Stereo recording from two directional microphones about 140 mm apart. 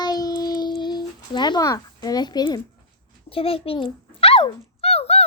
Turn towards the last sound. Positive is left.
turn(degrees=45)  # may be behind; listen again after turning